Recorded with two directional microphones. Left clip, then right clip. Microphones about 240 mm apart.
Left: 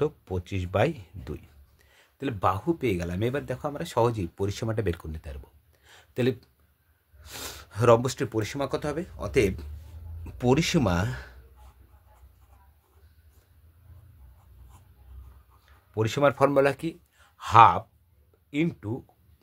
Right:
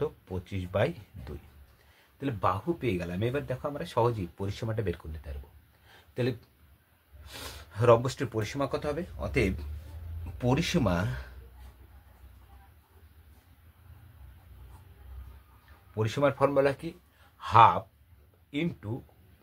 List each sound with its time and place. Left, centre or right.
0.0 s speech: left
5.9 s a sound: left
7.2 s speech: left
15.9 s speech: left